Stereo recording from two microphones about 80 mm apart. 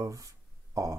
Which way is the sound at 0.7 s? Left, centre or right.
Right.